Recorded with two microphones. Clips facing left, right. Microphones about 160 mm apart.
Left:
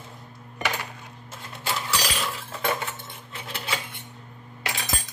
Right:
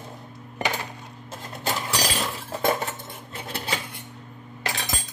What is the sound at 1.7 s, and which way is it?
Cutlery, 40° right (ahead or behind).